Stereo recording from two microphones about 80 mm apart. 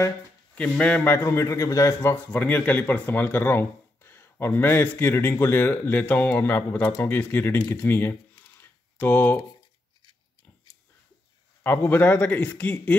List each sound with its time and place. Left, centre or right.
0.6 s speech: centre
1.0 s a man's voice: left
2.3 s speech: left
7.7 s computer keyboard: left
11.6 s speech: left